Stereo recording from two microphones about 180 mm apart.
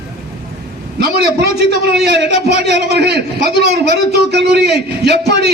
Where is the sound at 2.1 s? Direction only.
65° right (ahead or behind).